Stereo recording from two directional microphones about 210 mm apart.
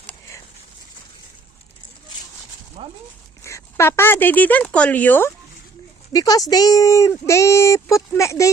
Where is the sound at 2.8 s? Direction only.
25° right (ahead or behind).